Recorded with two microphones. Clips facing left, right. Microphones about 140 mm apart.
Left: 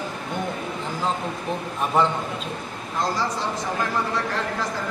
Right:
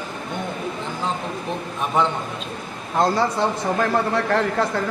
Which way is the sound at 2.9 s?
60° right (ahead or behind).